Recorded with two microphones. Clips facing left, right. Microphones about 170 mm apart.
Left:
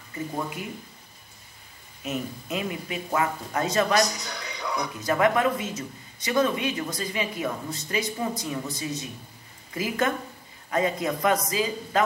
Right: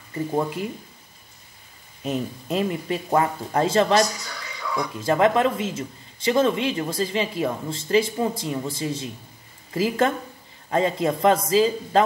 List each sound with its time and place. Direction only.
2.0 s speech: 35° right (ahead or behind)
4.0 s speech: 20° left (ahead or behind)
5.0 s speech: 25° right (ahead or behind)